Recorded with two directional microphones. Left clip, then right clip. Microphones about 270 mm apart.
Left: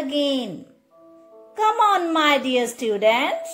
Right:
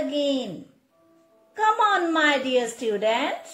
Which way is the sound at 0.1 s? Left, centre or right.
Left.